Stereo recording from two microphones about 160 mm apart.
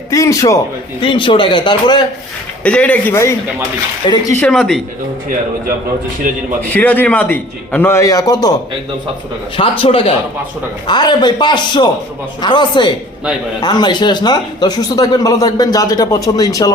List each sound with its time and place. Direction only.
0.1 s speech: 20° left (ahead or behind)
1.0 s speech: 30° left (ahead or behind)
2.6 s a man's voice: 10° left (ahead or behind)
4.4 s speech: centre (ahead or behind)
6.3 s a man's voice: 55° right (ahead or behind)
6.6 s a man's voice: 10° left (ahead or behind)
9.6 s speech: 35° left (ahead or behind)